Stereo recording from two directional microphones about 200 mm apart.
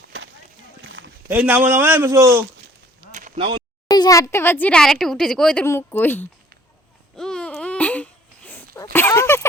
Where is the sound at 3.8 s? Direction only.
20° left (ahead or behind).